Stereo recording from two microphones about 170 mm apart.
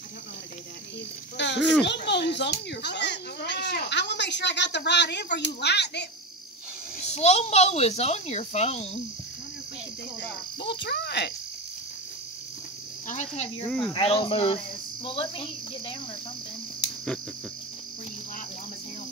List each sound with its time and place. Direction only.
1.3 s a child's voice: 90° left
7.1 s speech: 40° left (ahead or behind)
10.6 s speech: 80° left
13.1 s cricket: 45° left (ahead or behind)
13.9 s speech: 30° left (ahead or behind)